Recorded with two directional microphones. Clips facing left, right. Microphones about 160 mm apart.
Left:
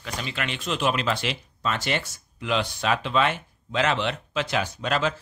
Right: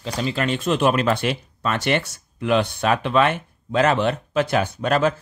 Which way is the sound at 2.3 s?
50° right (ahead or behind).